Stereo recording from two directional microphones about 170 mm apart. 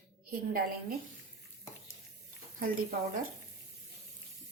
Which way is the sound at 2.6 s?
60° right (ahead or behind).